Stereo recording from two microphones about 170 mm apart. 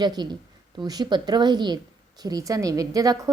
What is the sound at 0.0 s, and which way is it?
A woman's voice, 25° right (ahead or behind).